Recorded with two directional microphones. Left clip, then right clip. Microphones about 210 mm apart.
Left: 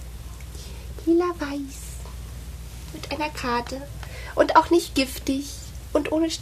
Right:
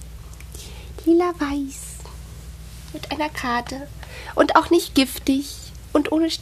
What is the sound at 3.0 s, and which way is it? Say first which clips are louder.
A woman's voice: right 3 dB; 35° right (ahead or behind).